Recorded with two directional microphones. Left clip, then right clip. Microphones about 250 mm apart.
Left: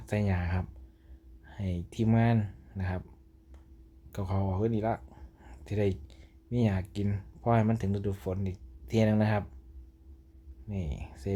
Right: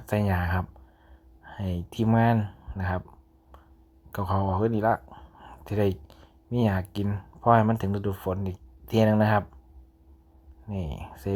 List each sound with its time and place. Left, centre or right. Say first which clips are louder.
0.0 s speech: right 6 dB; centre
4.1 s speech: right 8 dB; centre
10.7 s speech: right 5 dB; centre